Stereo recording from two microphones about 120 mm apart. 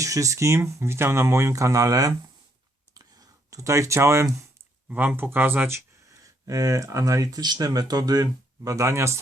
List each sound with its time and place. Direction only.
0.0 s speech: 25° right (ahead or behind)
2.9 s clicking: 30° right (ahead or behind)
4.9 s speech: 15° right (ahead or behind)